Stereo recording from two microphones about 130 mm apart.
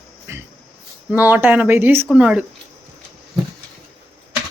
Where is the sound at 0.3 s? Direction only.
20° right (ahead or behind).